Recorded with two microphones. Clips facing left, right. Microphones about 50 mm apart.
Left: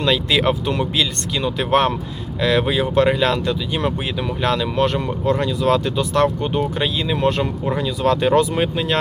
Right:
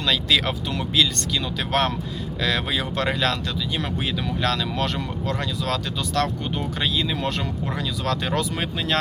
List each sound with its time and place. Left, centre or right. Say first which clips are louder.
0.0 s speech: left 4 dB; left